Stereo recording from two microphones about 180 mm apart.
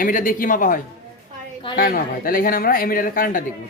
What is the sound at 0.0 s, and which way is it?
Speech, 50° left (ahead or behind).